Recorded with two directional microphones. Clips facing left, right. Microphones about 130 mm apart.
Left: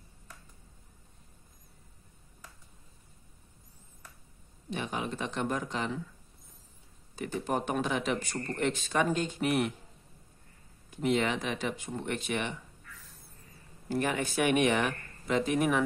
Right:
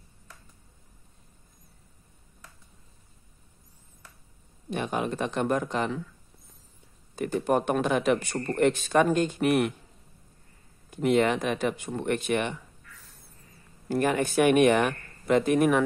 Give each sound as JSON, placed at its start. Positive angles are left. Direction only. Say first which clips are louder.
{"t": 4.6, "sound": "speech", "louder": "right 6 dB", "side_deg": -55}
{"t": 7.2, "sound": "speech", "louder": "right 7 dB", "side_deg": -55}
{"t": 10.9, "sound": "speech", "louder": "right 6 dB", "side_deg": -55}
{"t": 13.8, "sound": "speech", "louder": "right 5 dB", "side_deg": -50}